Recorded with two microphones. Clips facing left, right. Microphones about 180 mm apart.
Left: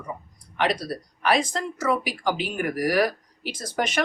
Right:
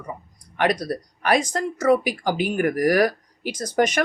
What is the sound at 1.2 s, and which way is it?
A woman's voice, 45° right (ahead or behind).